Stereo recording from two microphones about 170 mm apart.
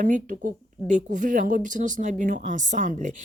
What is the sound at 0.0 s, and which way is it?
A woman's voice, 50° right (ahead or behind).